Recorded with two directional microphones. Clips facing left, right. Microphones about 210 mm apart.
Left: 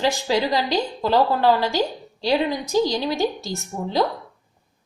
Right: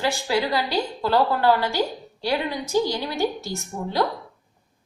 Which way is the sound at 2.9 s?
20° left (ahead or behind).